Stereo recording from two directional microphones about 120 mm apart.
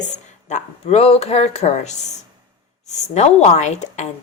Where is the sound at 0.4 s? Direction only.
70° left (ahead or behind).